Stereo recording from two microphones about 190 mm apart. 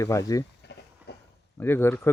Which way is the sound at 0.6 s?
60° left (ahead or behind).